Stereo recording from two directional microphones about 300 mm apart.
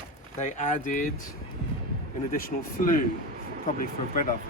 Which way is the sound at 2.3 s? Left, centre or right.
Left.